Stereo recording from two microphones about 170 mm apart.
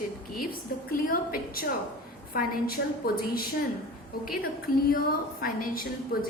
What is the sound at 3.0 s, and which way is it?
A woman's voice, 60° left (ahead or behind).